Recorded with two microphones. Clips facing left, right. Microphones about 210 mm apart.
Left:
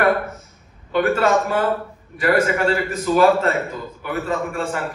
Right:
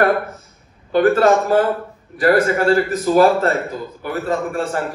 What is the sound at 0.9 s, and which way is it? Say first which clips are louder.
A man's voice: right 4 dB; 40° right (ahead or behind).